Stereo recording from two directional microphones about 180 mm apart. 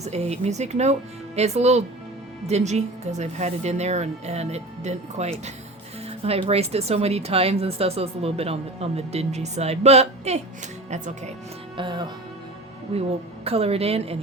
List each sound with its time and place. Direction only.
0.0 s speech: 35° right (ahead or behind)
11.8 s speech: 25° right (ahead or behind)